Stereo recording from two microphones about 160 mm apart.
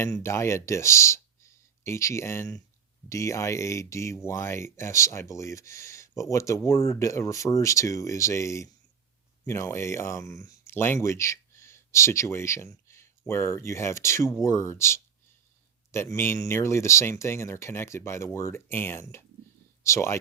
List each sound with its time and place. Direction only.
0.0 s speech: 15° left (ahead or behind)